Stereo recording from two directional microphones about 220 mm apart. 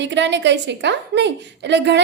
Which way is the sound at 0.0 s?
55° right (ahead or behind).